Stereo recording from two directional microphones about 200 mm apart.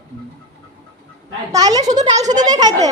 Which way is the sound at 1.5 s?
20° right (ahead or behind).